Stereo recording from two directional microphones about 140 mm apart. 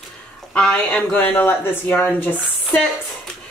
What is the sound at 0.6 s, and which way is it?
Speech, 10° left (ahead or behind).